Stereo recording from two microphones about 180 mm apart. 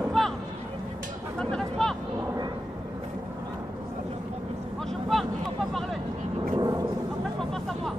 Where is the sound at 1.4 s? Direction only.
5° left (ahead or behind).